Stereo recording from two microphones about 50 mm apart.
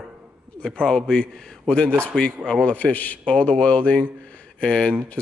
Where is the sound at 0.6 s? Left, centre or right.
Centre.